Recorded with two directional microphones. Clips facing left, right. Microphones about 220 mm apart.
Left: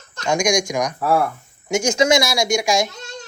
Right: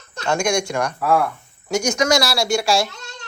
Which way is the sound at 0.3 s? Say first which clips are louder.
Left 1 dB; 10° left (ahead or behind).